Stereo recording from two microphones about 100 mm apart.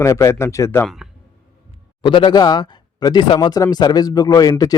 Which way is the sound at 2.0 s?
55° left (ahead or behind).